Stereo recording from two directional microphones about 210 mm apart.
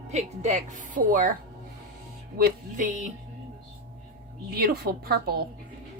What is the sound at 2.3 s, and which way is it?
Speech, 40° right (ahead or behind).